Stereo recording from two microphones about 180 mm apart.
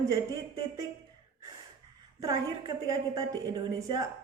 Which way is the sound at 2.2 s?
20° right (ahead or behind).